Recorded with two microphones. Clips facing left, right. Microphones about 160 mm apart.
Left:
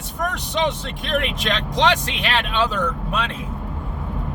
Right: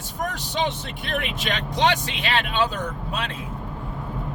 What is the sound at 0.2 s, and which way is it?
Speech, 70° left (ahead or behind).